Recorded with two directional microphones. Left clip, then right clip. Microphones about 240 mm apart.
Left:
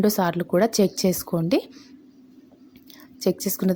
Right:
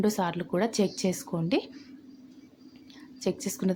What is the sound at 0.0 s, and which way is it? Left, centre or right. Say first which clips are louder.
Speech: left 6 dB; left.